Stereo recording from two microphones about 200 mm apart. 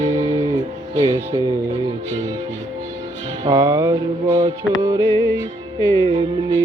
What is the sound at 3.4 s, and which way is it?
Music, 15° right (ahead or behind).